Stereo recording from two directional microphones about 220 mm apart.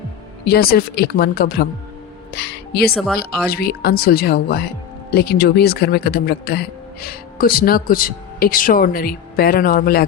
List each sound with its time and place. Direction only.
0.4 s speech: 45° left (ahead or behind)
2.9 s speech: centre (ahead or behind)
3.4 s speech: 45° left (ahead or behind)